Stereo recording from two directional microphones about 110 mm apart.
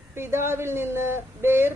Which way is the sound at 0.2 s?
20° right (ahead or behind).